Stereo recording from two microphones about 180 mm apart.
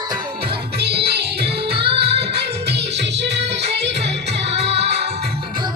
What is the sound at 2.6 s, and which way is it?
Music, 70° right (ahead or behind).